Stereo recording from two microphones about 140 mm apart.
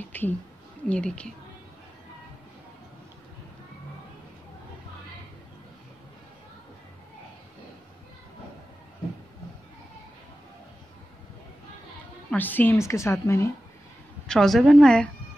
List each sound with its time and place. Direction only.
0.0 s a sound: 15° left (ahead or behind)
0.8 s speech: 10° left (ahead or behind)
12.3 s a woman's voice: 15° left (ahead or behind)
14.2 s a woman's voice: 5° left (ahead or behind)